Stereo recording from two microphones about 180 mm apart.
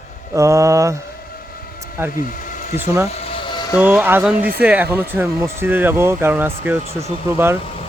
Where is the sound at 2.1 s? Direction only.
45° left (ahead or behind).